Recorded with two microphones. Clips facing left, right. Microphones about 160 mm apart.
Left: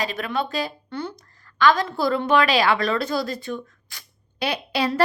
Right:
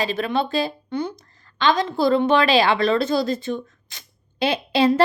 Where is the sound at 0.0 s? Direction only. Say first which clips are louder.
Right 4 dB; 30° right (ahead or behind).